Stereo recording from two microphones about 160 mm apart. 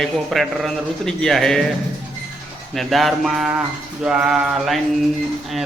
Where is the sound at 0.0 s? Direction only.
Centre (ahead or behind).